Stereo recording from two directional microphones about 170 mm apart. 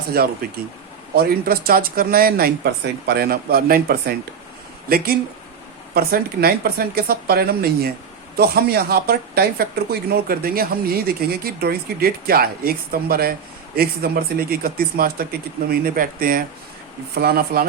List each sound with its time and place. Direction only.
0.1 s speech: 65° right (ahead or behind)